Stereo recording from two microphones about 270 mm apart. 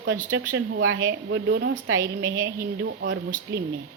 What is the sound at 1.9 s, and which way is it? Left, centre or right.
Speech, centre.